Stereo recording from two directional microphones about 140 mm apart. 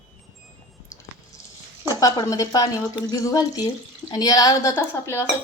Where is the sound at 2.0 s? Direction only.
25° left (ahead or behind).